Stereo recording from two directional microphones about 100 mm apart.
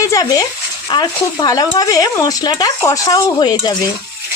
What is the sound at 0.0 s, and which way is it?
Speech, 35° left (ahead or behind).